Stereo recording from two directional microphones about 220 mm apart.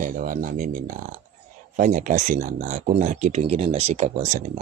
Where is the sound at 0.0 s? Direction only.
40° right (ahead or behind).